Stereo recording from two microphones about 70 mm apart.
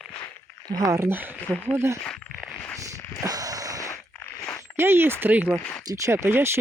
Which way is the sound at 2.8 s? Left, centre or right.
Right.